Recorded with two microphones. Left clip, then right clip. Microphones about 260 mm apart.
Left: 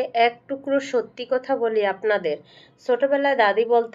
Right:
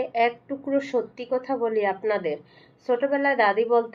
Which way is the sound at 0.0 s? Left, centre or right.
Left.